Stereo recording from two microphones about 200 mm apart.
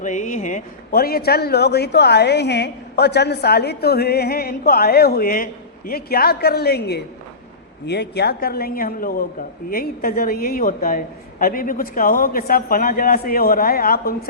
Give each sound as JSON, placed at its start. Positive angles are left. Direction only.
{"t": 0.0, "sound": "a man's voice", "side_deg": 40}